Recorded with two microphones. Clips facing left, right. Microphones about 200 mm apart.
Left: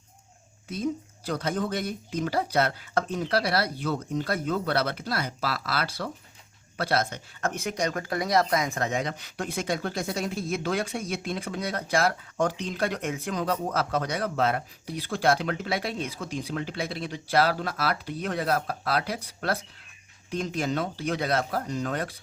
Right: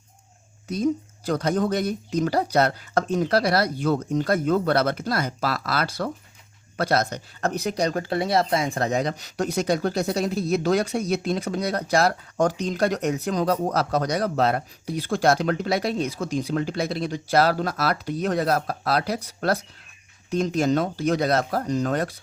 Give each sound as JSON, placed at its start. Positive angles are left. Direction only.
{"t": 0.7, "sound": "speech", "side_deg": -45}